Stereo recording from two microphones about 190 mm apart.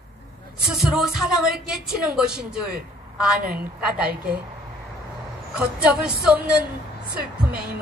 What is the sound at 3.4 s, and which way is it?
Speech, 50° right (ahead or behind).